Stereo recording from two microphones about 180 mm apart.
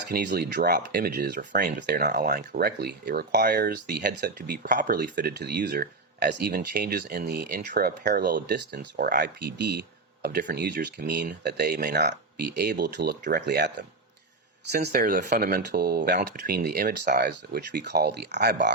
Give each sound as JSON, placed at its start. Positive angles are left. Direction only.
{"t": 0.1, "sound": "speech", "side_deg": -60}
{"t": 14.9, "sound": "speech", "side_deg": -50}